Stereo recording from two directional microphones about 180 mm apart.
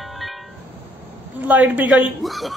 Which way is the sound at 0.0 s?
Centre (ahead or behind).